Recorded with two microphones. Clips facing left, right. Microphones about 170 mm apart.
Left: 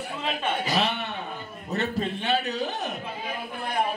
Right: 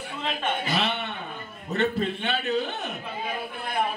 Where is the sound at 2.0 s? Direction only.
40° left (ahead or behind).